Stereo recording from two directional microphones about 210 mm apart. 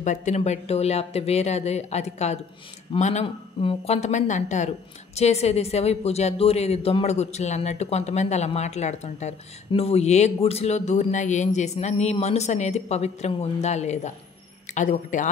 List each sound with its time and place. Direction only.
0.0 s a woman's voice: 35° left (ahead or behind)